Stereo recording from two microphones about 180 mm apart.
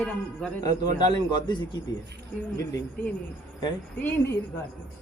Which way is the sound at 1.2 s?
25° left (ahead or behind).